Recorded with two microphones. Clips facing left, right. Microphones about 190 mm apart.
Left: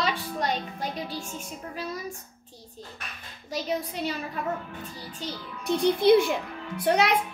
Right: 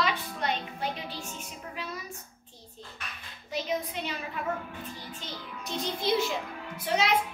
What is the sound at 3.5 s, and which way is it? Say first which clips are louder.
Speech: left 2 dB; 40° left (ahead or behind).